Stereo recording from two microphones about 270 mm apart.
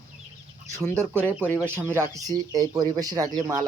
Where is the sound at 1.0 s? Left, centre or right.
Centre.